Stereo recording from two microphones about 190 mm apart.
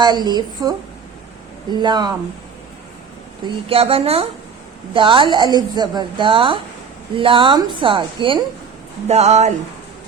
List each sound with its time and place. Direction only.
0.0 s speech: 20° right (ahead or behind)
1.8 s speech: 20° right (ahead or behind)
3.4 s a woman's voice: 30° right (ahead or behind)